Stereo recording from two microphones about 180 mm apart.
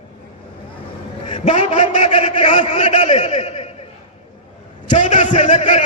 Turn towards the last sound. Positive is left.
turn(degrees=40)  # may be behind; listen again after turning